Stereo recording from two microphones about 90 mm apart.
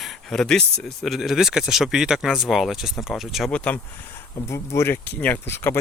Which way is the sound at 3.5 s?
15° left (ahead or behind).